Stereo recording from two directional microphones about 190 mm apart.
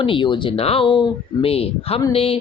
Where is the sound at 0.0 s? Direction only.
25° left (ahead or behind).